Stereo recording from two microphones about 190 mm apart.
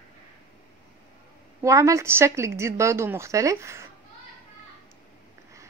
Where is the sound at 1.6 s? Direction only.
15° right (ahead or behind).